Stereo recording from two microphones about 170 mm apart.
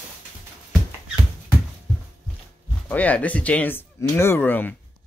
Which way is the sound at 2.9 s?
10° left (ahead or behind).